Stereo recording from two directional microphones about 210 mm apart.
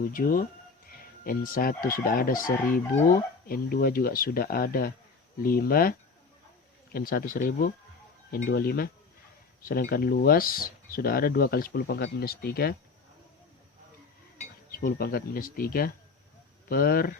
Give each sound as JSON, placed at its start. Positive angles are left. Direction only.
{"t": 0.1, "sound": "speech", "side_deg": 40}
{"t": 14.7, "sound": "speech", "side_deg": 45}